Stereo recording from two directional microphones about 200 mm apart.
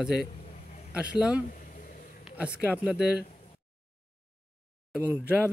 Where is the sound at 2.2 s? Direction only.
5° right (ahead or behind).